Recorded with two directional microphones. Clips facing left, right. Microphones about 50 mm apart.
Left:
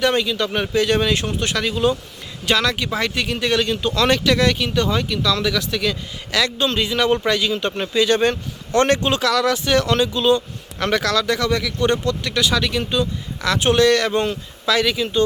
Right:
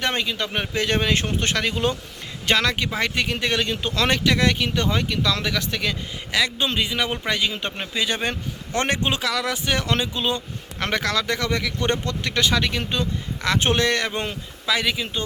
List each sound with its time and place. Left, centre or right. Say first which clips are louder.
0.0 s speech: left 6 dB; right
6.3 s a man's voice: left 3 dB; centre